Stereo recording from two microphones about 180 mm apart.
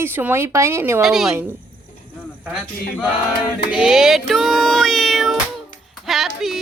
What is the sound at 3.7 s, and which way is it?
Meow, 5° right (ahead or behind).